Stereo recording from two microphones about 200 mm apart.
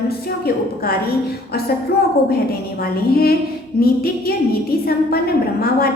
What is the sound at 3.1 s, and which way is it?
A woman's voice, 50° left (ahead or behind).